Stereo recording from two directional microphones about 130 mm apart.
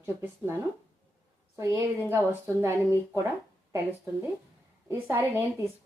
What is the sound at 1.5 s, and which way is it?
A woman's voice, 20° right (ahead or behind).